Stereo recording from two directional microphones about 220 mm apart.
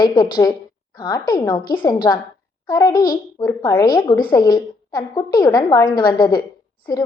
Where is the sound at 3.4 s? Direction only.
15° left (ahead or behind).